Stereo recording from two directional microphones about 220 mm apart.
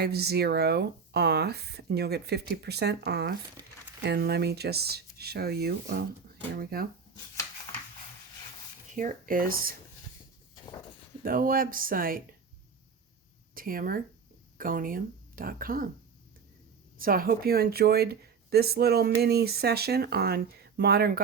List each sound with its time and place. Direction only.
0.0 s speech: 45° right (ahead or behind)
9.0 s speech: 40° right (ahead or behind)
11.2 s speech: 40° right (ahead or behind)
13.5 s speech: 40° right (ahead or behind)
17.0 s speech: 40° right (ahead or behind)